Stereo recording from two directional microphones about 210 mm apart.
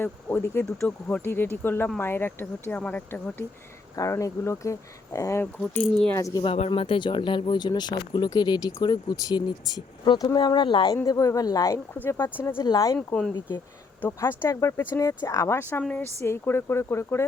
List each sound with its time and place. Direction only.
0.0 s speech: 10° left (ahead or behind)
13.0 s speech: 5° left (ahead or behind)